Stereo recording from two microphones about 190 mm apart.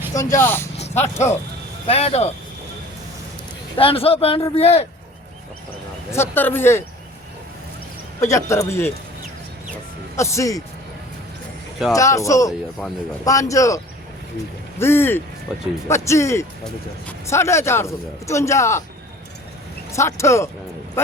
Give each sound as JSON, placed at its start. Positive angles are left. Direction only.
{"t": 0.1, "sound": "a man's voice", "side_deg": 15}
{"t": 0.8, "sound": "speech", "side_deg": 35}
{"t": 3.8, "sound": "speech", "side_deg": 30}
{"t": 6.1, "sound": "a man's voice", "side_deg": 10}
{"t": 8.3, "sound": "a man's voice", "side_deg": 15}
{"t": 10.2, "sound": "a man's voice", "side_deg": 15}
{"t": 11.9, "sound": "a man's voice", "side_deg": 15}
{"t": 19.9, "sound": "a man's voice", "side_deg": 15}